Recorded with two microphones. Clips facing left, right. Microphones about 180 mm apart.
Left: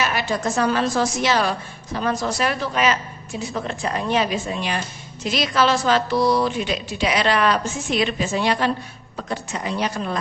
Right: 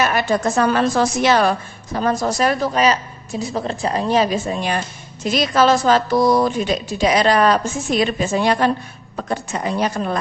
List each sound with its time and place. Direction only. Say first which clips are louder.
0.0 s a woman's voice: right 5 dB; 50° right (ahead or behind)